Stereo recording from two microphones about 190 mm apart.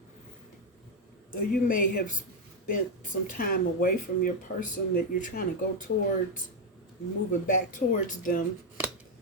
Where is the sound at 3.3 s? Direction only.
50° left (ahead or behind).